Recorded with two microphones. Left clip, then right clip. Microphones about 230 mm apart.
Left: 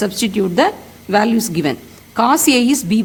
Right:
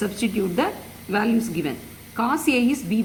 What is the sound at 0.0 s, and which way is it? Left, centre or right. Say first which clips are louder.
A woman's voice: left 7 dB; left.